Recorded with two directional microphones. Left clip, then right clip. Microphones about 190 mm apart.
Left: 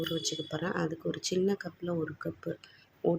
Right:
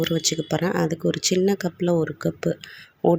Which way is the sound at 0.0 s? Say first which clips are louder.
Right 10 dB; 25° right (ahead or behind).